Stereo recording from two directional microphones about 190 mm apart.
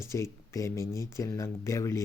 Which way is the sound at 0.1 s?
15° left (ahead or behind).